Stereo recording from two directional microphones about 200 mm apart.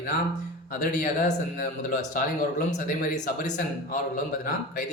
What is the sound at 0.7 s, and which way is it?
Speech, 40° left (ahead or behind).